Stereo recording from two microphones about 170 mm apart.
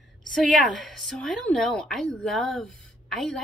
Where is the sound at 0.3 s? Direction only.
Centre (ahead or behind).